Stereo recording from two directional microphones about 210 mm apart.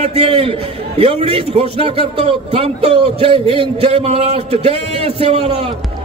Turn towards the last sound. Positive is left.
turn(degrees=-30)  # may be behind; listen again after turning